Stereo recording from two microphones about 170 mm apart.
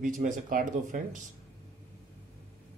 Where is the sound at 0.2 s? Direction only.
50° right (ahead or behind).